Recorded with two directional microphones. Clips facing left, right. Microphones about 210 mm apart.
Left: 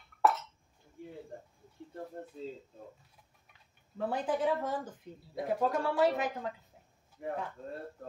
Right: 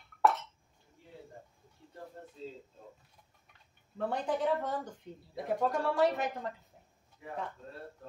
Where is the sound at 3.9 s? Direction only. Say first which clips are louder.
Left 1 dB; centre (ahead or behind).